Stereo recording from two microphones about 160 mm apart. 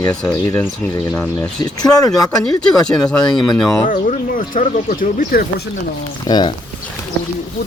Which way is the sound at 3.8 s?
55° left (ahead or behind).